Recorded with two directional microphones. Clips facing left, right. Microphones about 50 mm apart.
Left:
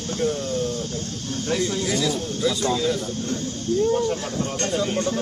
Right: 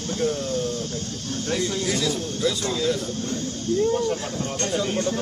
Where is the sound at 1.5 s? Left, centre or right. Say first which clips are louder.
Left 1 dB; centre.